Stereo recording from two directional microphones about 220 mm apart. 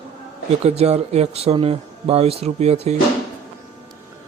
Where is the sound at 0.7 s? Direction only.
30° right (ahead or behind).